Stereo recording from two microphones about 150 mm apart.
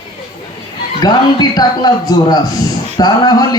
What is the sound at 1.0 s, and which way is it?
Speech, 25° left (ahead or behind).